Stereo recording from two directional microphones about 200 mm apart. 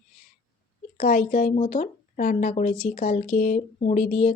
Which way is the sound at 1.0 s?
45° left (ahead or behind).